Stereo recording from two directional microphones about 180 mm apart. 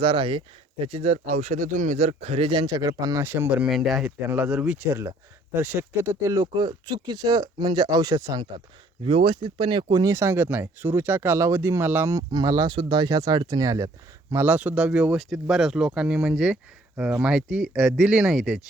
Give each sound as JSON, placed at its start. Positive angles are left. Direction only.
{"t": 0.0, "sound": "speech", "side_deg": -25}